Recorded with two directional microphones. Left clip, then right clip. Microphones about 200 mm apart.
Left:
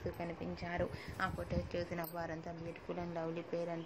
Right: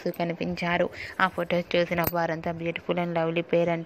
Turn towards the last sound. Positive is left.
turn(degrees=-40)  # may be behind; listen again after turning